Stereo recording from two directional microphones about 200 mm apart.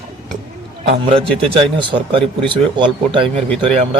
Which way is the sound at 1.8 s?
25° right (ahead or behind).